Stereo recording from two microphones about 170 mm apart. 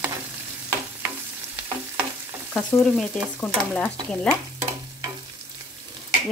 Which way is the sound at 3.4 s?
10° left (ahead or behind).